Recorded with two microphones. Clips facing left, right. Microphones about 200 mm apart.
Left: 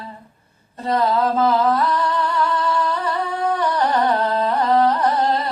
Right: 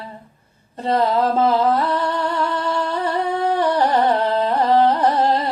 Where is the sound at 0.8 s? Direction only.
30° right (ahead or behind).